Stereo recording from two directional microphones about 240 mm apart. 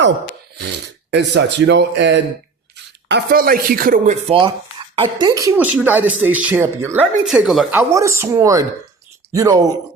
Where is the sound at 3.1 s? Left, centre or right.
Right.